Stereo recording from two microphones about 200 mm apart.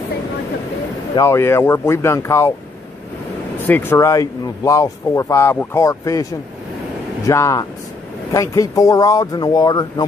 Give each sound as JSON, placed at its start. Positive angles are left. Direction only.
{"t": 1.1, "sound": "speech", "side_deg": 15}
{"t": 3.6, "sound": "speech", "side_deg": 10}
{"t": 7.2, "sound": "speech", "side_deg": 15}